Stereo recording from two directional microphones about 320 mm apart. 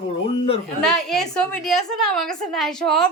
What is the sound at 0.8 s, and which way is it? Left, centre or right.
A woman's voice, centre.